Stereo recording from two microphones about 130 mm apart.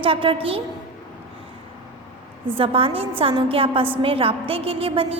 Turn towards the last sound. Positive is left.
turn(degrees=-45)  # may be behind; listen again after turning